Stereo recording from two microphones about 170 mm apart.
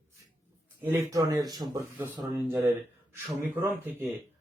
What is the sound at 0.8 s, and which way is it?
A man's voice, 20° right (ahead or behind).